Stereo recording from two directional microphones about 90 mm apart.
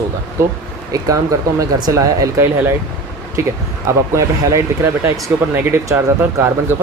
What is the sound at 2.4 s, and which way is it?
Speech, 25° right (ahead or behind).